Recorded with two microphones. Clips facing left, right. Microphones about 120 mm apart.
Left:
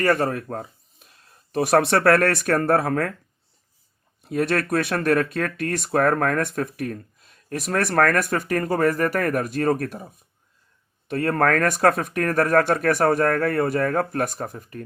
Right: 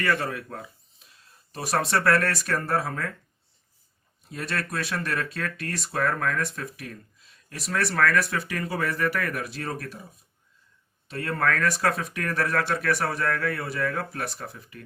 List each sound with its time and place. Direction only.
0.0 s speech: 45° left (ahead or behind); by 3.1 s 60° left (ahead or behind)
4.2 s speech: 60° left (ahead or behind)
11.1 s speech: 55° left (ahead or behind)